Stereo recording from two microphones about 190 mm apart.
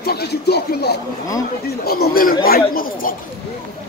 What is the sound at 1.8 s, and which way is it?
Speech, 55° left (ahead or behind).